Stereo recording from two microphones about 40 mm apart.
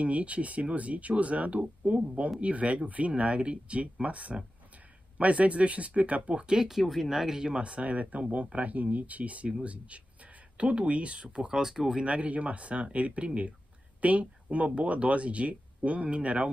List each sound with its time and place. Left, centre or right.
0.0 s speech: right
6.6 s speech: centre
7.3 s speech: right
11.2 s speech: centre
12.0 s speech: right